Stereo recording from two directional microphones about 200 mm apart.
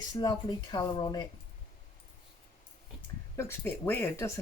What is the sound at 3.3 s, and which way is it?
Speech, 10° left (ahead or behind).